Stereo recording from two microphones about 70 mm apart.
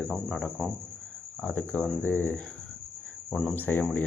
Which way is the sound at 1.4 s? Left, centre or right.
Left.